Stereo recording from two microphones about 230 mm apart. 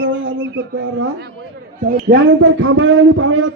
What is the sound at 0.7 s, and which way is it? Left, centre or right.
Speech, right.